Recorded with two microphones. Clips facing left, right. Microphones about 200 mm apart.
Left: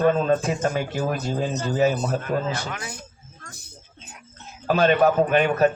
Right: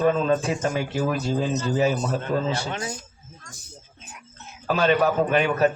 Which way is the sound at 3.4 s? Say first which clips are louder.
Left 3 dB; 60° left (ahead or behind).